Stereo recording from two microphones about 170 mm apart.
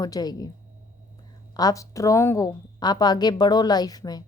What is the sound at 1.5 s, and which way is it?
A woman's voice, 20° left (ahead or behind).